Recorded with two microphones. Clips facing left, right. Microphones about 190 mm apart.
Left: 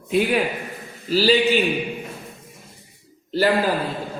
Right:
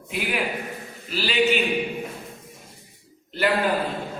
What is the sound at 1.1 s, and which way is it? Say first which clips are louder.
Speech: left 12 dB; 35° left (ahead or behind).